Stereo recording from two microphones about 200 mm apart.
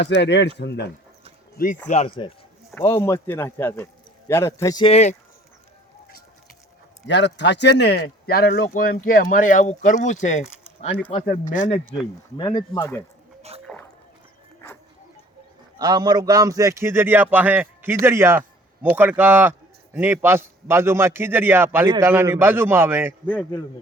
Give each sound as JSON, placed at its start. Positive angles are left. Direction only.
{"t": 0.0, "sound": "speech", "side_deg": 60}
{"t": 1.5, "sound": "speech", "side_deg": 40}
{"t": 1.9, "sound": "speech", "side_deg": 30}
{"t": 2.7, "sound": "speech", "side_deg": 10}
{"t": 4.9, "sound": "speech", "side_deg": 35}
{"t": 7.1, "sound": "speech", "side_deg": 60}
{"t": 12.4, "sound": "speech", "side_deg": 20}
{"t": 13.7, "sound": "rowboat", "side_deg": 0}
{"t": 15.8, "sound": "a man's voice", "side_deg": -20}